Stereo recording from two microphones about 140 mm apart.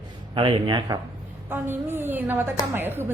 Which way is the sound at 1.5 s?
15° right (ahead or behind).